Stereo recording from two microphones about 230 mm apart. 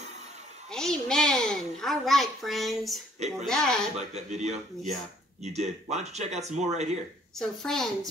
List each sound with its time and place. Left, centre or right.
0.7 s a sound: centre
3.3 s speech: centre
4.1 s speech: right
7.3 s speech: centre